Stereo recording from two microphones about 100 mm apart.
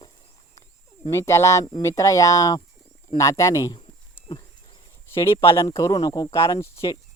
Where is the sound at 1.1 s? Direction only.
30° left (ahead or behind).